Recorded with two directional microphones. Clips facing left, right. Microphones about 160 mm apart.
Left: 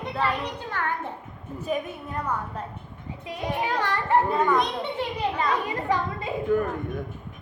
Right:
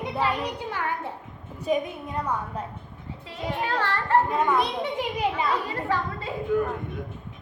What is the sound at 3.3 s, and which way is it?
Speech, 15° left (ahead or behind).